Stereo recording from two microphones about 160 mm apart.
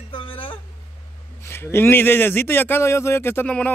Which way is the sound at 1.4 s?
15° left (ahead or behind).